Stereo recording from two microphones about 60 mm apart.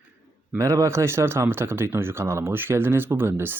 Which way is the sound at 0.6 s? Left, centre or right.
Right.